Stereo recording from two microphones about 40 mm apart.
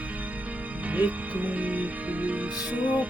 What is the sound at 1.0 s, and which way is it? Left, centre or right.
Music, right.